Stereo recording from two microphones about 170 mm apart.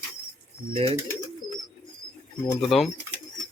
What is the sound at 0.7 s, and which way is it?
Speech, 35° right (ahead or behind).